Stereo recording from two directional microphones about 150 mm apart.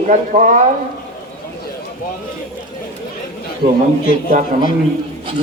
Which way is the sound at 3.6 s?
60° right (ahead or behind).